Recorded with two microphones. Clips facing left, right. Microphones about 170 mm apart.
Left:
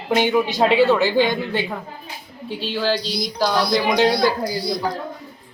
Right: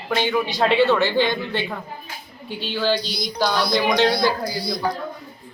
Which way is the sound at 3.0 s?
35° left (ahead or behind).